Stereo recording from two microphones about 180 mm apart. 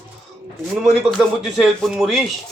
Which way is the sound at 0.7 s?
Centre (ahead or behind).